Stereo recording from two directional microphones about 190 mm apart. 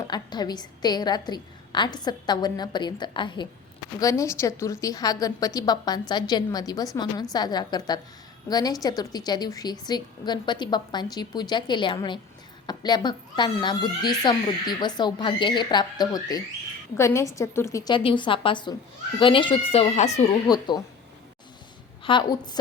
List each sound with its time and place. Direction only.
0.1 s speech: 20° left (ahead or behind)
20.5 s speech: 20° left (ahead or behind)
22.0 s a woman's voice: 25° left (ahead or behind)